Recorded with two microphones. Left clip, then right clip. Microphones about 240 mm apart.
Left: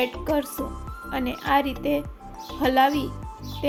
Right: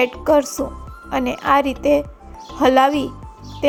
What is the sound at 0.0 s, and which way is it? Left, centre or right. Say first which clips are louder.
Speech: right 9 dB; right.